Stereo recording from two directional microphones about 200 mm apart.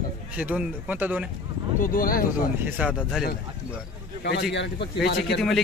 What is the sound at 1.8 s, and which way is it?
Speech, 45° left (ahead or behind).